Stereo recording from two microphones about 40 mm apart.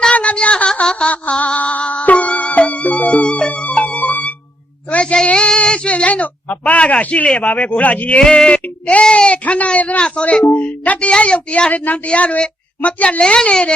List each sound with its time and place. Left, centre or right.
0.1 s a sound: left
0.9 s music: left
4.9 s a sound: left
6.1 s speech: left
8.2 s a woman's voice: left
9.4 s speech: left
10.0 s a woman's voice: left
10.5 s a woman's voice: left